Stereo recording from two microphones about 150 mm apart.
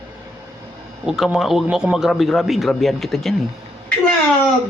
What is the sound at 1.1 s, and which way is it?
A man's voice, 5° right (ahead or behind).